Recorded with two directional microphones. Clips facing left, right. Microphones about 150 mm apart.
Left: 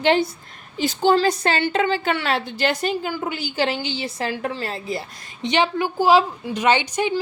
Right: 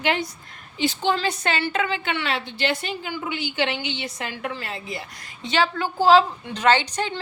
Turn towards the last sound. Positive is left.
turn(degrees=10)  # may be behind; listen again after turning